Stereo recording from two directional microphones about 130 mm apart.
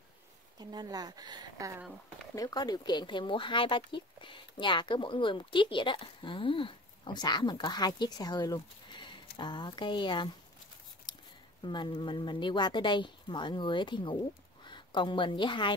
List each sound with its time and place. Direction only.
0.6 s speech: 30° right (ahead or behind)
2.3 s speech: 30° left (ahead or behind)
11.1 s a sound: 35° left (ahead or behind)
11.6 s a woman's voice: 35° left (ahead or behind)